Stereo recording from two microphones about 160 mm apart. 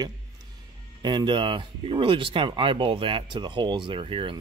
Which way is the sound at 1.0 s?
25° right (ahead or behind).